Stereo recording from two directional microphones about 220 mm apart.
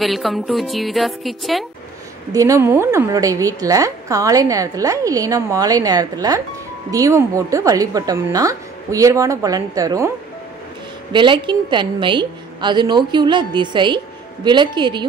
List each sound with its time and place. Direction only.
0.0 s a woman's voice: centre (ahead or behind)
2.3 s a woman's voice: 15° right (ahead or behind)
11.1 s a woman's voice: 20° right (ahead or behind)